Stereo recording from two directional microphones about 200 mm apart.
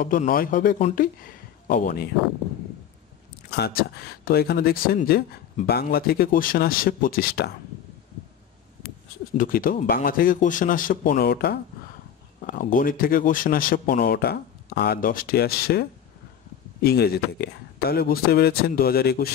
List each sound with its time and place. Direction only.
0.0 s speech: 45° left (ahead or behind)
3.4 s speech: 55° left (ahead or behind)
9.4 s speech: 45° left (ahead or behind)